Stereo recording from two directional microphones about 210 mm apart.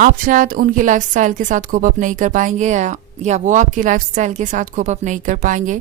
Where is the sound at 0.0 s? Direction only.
40° right (ahead or behind).